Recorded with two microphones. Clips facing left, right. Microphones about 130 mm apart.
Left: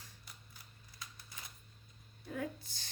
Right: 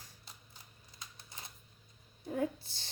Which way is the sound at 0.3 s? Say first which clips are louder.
Right 1 dB; 30° right (ahead or behind).